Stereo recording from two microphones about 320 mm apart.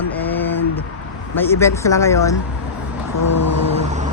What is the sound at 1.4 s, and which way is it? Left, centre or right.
Speech, centre.